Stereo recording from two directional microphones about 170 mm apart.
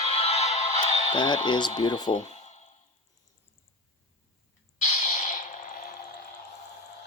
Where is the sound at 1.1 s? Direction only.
25° left (ahead or behind).